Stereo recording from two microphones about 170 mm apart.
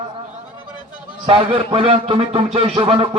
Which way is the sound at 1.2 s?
35° right (ahead or behind).